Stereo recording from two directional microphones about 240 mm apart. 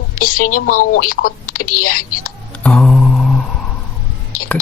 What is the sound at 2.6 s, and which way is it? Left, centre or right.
Mantra, centre.